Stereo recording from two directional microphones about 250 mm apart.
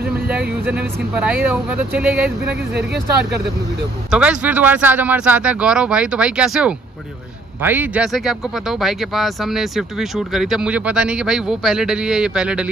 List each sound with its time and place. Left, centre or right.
0.6 s speech: centre
2.7 s speech: right
4.1 s speech: centre